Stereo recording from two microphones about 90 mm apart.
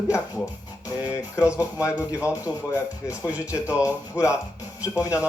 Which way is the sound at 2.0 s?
15° right (ahead or behind).